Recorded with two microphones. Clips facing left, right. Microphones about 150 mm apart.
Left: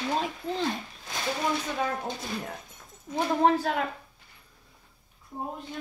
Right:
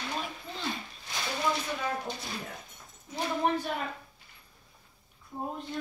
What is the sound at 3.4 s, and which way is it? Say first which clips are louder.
Speech: left 6 dB; 90° left.